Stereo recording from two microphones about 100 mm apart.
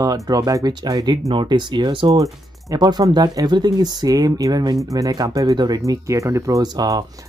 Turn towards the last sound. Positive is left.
turn(degrees=-40)  # may be behind; listen again after turning